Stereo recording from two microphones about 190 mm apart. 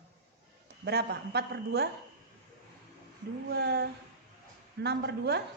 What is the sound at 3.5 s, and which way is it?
A woman's voice, 60° right (ahead or behind).